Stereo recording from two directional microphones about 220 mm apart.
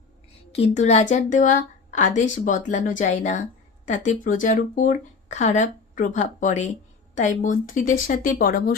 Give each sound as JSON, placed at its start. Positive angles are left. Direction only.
{"t": 0.5, "sound": "speech", "side_deg": 30}